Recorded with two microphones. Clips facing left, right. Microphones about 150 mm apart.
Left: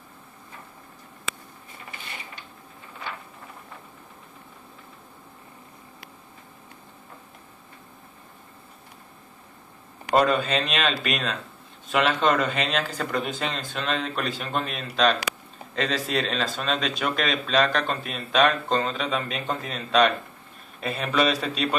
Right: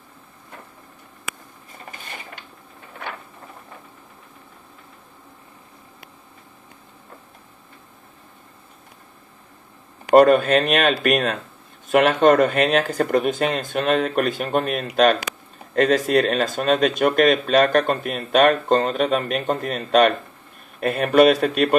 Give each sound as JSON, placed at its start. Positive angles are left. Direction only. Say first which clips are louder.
{"t": 10.1, "sound": "speech", "louder": "right 8 dB", "side_deg": -55}